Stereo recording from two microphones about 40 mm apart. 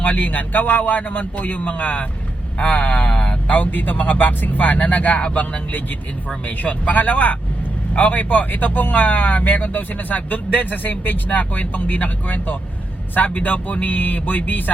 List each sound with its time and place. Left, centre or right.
0.0 s speech: left
3.2 s a sound: left
3.5 s speech: left